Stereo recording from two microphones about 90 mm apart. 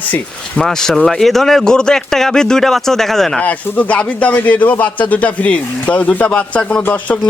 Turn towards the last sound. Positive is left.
turn(degrees=15)  # may be behind; listen again after turning